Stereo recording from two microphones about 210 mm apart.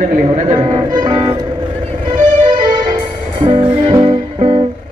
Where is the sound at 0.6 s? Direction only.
25° right (ahead or behind).